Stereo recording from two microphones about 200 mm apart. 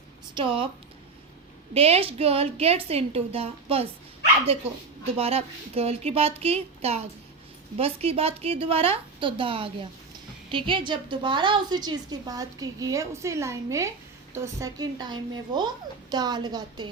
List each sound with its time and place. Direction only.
0.3 s a woman's voice: 25° right (ahead or behind)
1.7 s a woman's voice: 30° right (ahead or behind)
5.1 s a woman's voice: 30° right (ahead or behind)